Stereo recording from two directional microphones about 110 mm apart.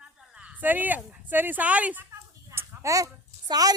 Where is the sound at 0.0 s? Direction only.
10° right (ahead or behind).